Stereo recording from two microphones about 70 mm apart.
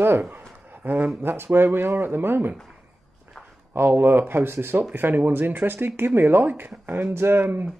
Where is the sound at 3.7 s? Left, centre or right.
Right.